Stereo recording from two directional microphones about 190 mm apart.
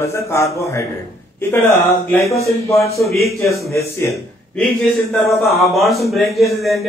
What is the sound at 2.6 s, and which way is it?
Speech, 15° left (ahead or behind).